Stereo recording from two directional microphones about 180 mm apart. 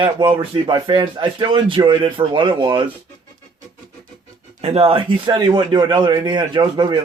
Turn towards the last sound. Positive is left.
turn(degrees=-25)  # may be behind; listen again after turning